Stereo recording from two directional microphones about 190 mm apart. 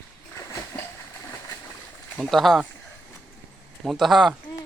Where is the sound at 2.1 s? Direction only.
Centre (ahead or behind).